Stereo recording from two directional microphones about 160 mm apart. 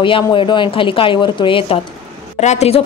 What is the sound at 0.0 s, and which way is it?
Speech, 30° left (ahead or behind).